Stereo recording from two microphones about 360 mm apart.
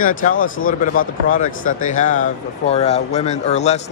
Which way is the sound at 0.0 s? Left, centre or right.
Left.